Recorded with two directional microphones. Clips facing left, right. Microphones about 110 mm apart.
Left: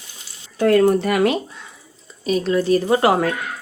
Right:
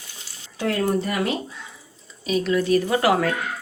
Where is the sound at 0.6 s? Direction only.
65° left (ahead or behind).